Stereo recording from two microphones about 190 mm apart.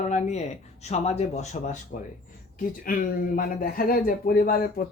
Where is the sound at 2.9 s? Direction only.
45° left (ahead or behind).